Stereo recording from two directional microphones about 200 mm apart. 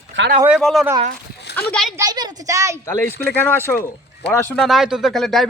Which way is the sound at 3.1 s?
55° left (ahead or behind).